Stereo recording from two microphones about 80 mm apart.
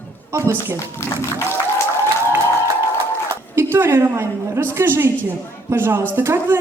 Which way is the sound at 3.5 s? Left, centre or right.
Right.